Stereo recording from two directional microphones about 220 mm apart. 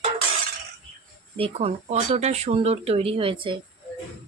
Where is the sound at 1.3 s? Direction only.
25° right (ahead or behind).